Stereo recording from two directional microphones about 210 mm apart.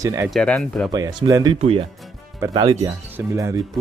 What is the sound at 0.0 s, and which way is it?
Speech, 15° right (ahead or behind).